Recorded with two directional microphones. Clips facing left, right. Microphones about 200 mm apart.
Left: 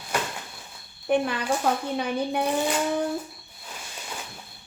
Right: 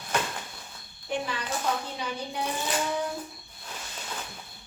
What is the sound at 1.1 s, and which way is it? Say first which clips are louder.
A woman's voice: left 8 dB; 55° left (ahead or behind).